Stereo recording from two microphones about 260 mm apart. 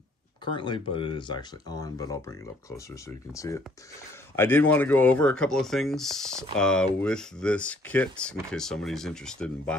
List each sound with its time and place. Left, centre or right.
0.5 s speech: centre